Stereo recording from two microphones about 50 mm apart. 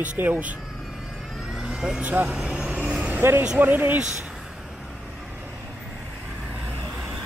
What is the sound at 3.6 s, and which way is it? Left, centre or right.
Speech, right.